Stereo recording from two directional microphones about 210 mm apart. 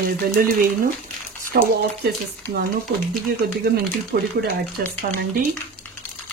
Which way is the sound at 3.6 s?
50° right (ahead or behind).